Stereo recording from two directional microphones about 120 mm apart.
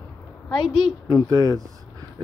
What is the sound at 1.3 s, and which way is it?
Speech, 30° right (ahead or behind).